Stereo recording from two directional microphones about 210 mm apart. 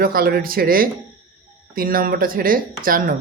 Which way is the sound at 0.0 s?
45° right (ahead or behind).